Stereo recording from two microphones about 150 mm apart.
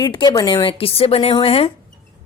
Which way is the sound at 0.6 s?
40° left (ahead or behind).